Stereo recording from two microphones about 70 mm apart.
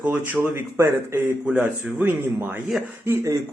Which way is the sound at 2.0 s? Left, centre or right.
Right.